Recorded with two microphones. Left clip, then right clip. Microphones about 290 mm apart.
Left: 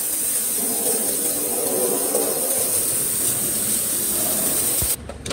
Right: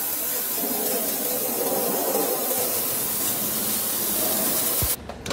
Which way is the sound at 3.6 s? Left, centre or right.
Right.